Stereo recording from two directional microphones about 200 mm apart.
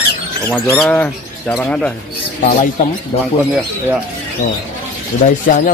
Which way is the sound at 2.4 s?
40° left (ahead or behind).